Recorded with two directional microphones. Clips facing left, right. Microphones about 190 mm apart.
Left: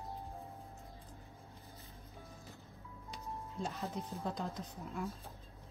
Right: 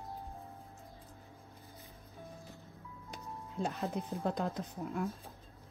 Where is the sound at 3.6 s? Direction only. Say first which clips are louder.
Right 5 dB; 55° right (ahead or behind).